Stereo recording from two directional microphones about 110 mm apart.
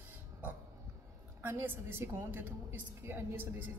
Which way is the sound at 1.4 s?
20° right (ahead or behind).